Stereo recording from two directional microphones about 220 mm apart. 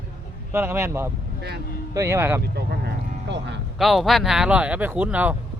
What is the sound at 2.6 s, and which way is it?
Speech, 50° right (ahead or behind).